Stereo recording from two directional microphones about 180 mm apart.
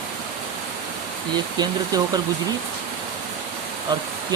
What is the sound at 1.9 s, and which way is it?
Speech, 20° right (ahead or behind).